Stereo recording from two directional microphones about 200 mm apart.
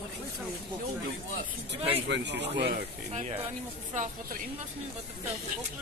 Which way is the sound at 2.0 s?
60° right (ahead or behind).